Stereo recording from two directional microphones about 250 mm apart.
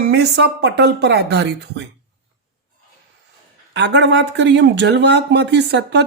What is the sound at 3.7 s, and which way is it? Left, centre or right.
Speech, right.